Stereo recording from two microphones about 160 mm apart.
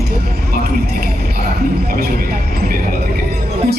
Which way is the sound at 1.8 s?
70° right (ahead or behind).